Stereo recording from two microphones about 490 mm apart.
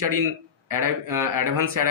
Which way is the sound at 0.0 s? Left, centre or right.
Right.